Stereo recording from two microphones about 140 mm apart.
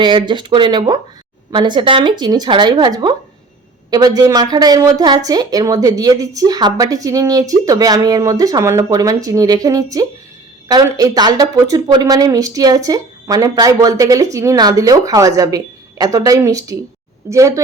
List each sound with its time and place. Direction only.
0.0 s speech: 35° right (ahead or behind)